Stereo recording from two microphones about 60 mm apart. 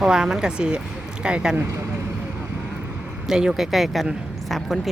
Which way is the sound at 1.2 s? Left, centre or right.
Centre.